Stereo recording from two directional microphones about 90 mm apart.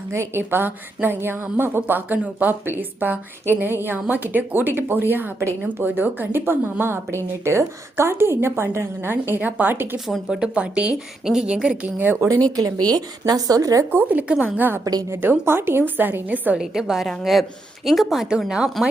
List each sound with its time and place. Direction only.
0.1 s a woman's voice: 30° right (ahead or behind)
10.1 s a woman's voice: 5° right (ahead or behind)
11.9 s a woman's voice: 20° right (ahead or behind)
12.5 s speech: 45° right (ahead or behind)
13.9 s a woman's voice: 20° right (ahead or behind)
16.6 s speech: 5° right (ahead or behind)